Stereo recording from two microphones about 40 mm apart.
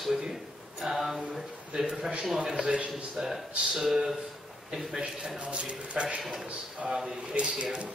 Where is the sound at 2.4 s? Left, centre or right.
Right.